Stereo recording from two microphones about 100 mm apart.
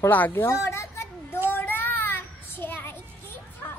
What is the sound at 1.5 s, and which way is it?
Child singing, 20° left (ahead or behind).